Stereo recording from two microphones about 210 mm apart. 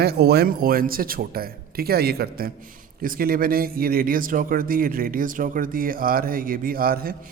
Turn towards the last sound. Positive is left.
turn(degrees=-45)  # may be behind; listen again after turning